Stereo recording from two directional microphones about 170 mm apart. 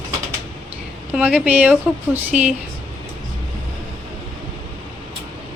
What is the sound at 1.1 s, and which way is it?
A woman's voice, 10° right (ahead or behind).